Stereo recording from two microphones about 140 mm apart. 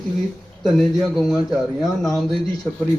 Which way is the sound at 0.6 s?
Centre (ahead or behind).